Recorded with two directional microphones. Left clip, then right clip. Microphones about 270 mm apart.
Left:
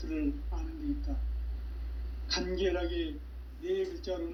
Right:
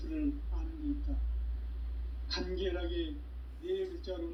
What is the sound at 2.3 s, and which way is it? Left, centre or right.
Speech, left.